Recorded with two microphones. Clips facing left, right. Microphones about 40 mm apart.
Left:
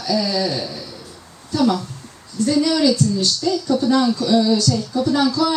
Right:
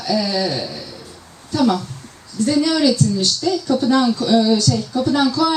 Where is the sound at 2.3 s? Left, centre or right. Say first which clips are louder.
Right 1 dB; right.